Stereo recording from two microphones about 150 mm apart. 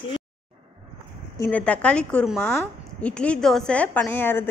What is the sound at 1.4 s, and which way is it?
A woman's voice, 10° left (ahead or behind).